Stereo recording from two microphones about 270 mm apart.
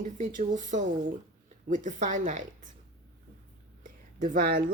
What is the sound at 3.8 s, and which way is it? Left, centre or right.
Whispering, right.